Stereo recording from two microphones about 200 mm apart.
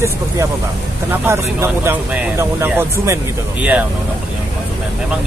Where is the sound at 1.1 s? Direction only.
10° right (ahead or behind).